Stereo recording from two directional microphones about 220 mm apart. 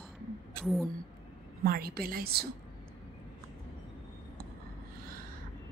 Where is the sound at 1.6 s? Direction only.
40° right (ahead or behind).